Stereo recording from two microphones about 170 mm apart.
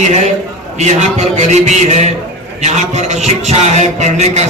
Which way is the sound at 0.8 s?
40° right (ahead or behind).